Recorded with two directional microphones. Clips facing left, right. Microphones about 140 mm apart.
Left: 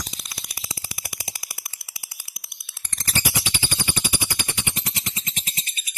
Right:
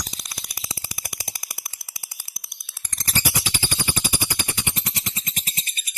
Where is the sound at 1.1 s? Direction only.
40° right (ahead or behind).